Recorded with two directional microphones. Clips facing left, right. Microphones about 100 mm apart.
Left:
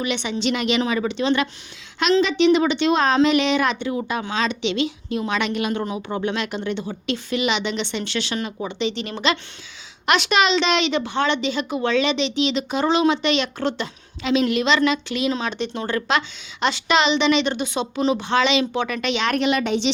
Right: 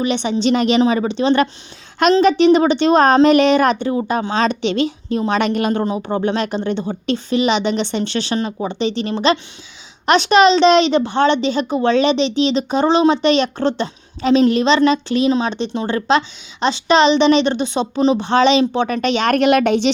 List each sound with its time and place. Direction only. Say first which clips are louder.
0.0 s a woman's voice: right 6 dB; 35° right (ahead or behind)
2.0 s a woman's voice: right 5 dB; 50° right (ahead or behind)